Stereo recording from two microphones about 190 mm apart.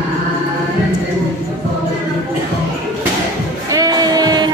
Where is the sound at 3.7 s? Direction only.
20° right (ahead or behind).